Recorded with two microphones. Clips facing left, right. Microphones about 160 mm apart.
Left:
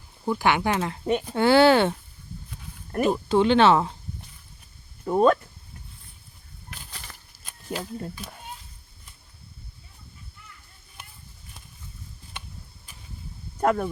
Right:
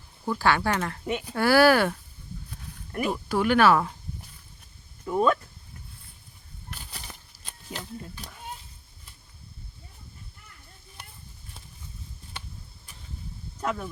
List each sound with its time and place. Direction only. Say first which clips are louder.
0.3 s speech: left 1 dB; 15° left (ahead or behind)
2.9 s speech: left 5 dB; 40° left (ahead or behind)
3.2 s speech: left 2 dB; 25° left (ahead or behind)
5.0 s speech: left 4 dB; 40° left (ahead or behind)
7.7 s speech: left 7 dB; 55° left (ahead or behind)
13.6 s speech: left 8 dB; 55° left (ahead or behind)